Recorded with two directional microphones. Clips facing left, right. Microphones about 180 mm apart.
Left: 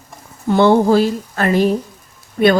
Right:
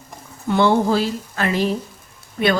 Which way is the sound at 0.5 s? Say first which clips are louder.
Left 5 dB; 45° left (ahead or behind).